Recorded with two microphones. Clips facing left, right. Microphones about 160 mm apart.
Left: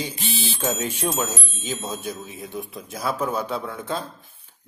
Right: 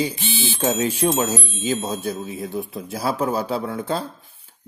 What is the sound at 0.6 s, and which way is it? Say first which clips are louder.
Speech: right 6 dB; 30° right (ahead or behind).